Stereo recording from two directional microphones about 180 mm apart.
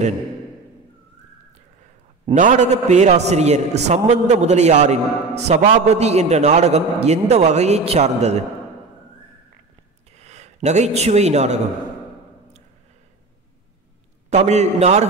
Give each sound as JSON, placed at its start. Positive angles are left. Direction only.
{"t": 2.3, "sound": "a man's voice", "side_deg": -40}
{"t": 10.1, "sound": "a man's voice", "side_deg": -40}
{"t": 14.3, "sound": "a man's voice", "side_deg": -40}